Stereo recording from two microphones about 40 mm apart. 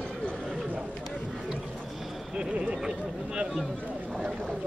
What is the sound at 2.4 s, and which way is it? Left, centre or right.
Speech, right.